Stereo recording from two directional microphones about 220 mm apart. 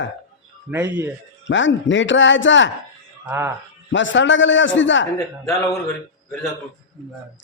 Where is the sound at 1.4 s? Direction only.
55° left (ahead or behind).